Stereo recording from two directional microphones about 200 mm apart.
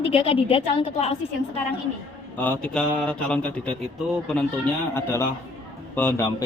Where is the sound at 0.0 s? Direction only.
30° left (ahead or behind).